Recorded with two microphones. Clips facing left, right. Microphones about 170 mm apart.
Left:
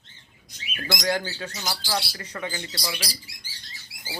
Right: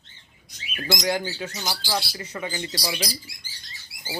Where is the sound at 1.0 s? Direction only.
15° right (ahead or behind).